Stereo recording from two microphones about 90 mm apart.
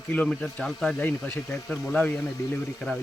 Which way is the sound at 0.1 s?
15° left (ahead or behind).